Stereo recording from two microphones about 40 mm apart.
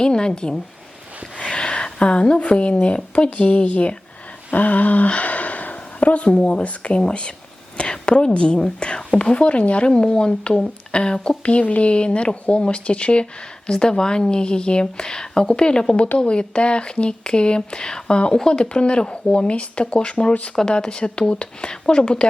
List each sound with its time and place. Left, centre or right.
0.0 s speech: left
1.4 s a sound: left
2.8 s speech: left
4.5 s speech: left